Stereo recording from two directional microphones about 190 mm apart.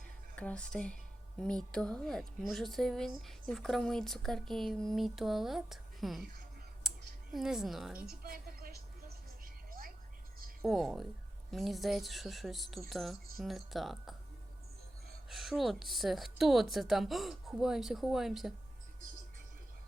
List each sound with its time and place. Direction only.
0.3 s a woman's voice: 5° left (ahead or behind)
6.8 s clicking: centre (ahead or behind)
7.3 s a woman's voice: centre (ahead or behind)
8.2 s a sound: 50° right (ahead or behind)
10.6 s a woman's voice: centre (ahead or behind)
15.3 s a woman's voice: centre (ahead or behind)